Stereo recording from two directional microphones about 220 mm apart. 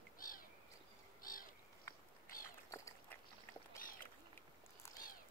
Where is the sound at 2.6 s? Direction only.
15° left (ahead or behind).